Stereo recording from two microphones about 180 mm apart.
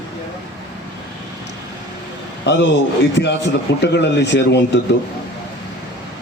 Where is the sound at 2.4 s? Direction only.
75° left (ahead or behind).